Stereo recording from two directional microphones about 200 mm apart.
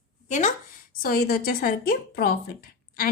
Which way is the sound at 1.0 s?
50° left (ahead or behind).